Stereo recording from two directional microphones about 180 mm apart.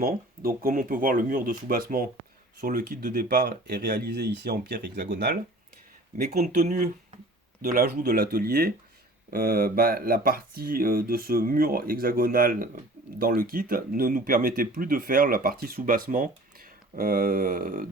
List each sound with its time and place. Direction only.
0.0 s speech: 55° right (ahead or behind)
6.2 s speech: 40° right (ahead or behind)
7.6 s speech: 55° right (ahead or behind)